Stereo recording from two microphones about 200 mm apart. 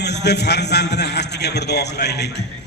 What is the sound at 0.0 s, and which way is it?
A man's voice, 55° left (ahead or behind).